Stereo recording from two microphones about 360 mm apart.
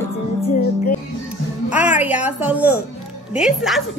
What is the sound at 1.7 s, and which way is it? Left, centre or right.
A woman's voice, centre.